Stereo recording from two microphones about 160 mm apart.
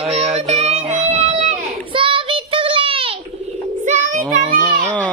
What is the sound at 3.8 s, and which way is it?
Child singing, 50° right (ahead or behind).